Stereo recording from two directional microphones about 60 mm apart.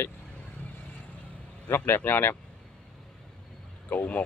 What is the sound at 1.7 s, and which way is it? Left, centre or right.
Speech, left.